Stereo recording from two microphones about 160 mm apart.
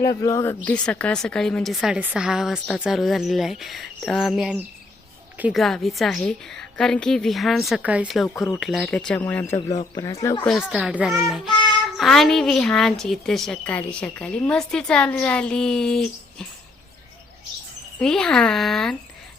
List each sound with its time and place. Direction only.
0.0 s speech: 20° left (ahead or behind)
9.6 s speech: 25° left (ahead or behind)
10.4 s speech: 5° left (ahead or behind)
18.0 s speech: 5° left (ahead or behind)